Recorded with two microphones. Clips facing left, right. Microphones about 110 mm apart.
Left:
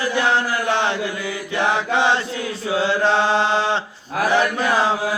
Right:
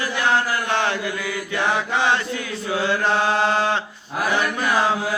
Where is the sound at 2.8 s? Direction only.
30° left (ahead or behind).